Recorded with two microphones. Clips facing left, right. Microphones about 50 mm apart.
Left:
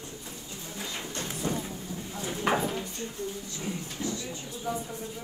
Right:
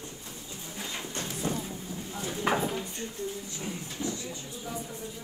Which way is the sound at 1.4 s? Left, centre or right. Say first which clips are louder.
Left 1 dB; centre.